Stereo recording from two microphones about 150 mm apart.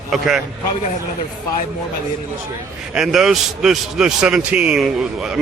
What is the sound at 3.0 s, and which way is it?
A man's voice, 5° right (ahead or behind).